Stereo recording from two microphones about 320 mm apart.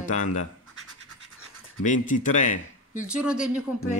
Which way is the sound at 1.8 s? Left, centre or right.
Left.